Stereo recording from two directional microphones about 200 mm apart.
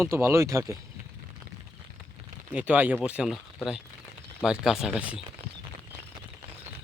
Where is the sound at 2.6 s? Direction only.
10° right (ahead or behind).